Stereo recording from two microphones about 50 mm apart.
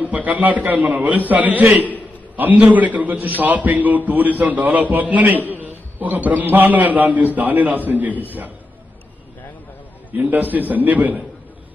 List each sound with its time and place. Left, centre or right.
0.0 s a man's voice: right
10.1 s a man's voice: right